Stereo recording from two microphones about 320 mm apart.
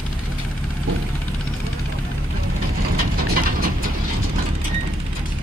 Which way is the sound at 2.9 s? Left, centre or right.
Right.